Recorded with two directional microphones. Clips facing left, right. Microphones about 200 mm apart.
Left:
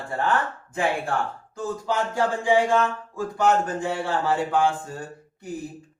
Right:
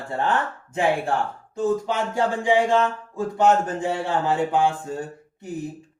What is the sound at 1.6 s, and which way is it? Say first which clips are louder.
Speech: right 4 dB; 20° right (ahead or behind).